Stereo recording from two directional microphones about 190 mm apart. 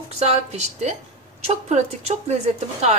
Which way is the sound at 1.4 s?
35° right (ahead or behind).